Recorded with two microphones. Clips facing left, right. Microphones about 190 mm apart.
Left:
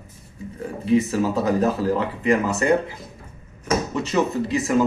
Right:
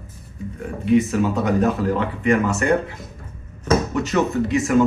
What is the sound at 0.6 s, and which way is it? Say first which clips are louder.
Speech: right 2 dB; 30° left (ahead or behind).